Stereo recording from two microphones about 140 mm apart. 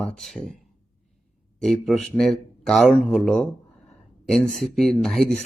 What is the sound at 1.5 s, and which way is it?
A man's voice, 5° left (ahead or behind).